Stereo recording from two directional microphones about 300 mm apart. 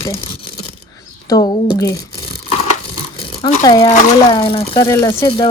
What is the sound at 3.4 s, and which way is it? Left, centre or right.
Speech, centre.